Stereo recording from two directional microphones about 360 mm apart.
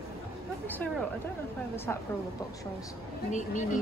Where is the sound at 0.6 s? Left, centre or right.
Centre.